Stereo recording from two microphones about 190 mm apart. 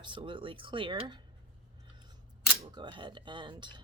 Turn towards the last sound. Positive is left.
turn(degrees=-25)  # may be behind; listen again after turning